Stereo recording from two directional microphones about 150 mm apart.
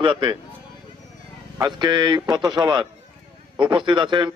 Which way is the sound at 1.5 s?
30° right (ahead or behind).